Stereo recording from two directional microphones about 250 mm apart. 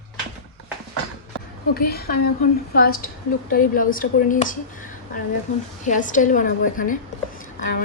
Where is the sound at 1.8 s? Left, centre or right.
Left.